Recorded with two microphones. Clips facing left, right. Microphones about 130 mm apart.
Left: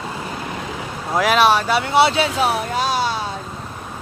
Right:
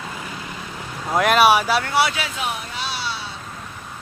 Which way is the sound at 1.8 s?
25° left (ahead or behind).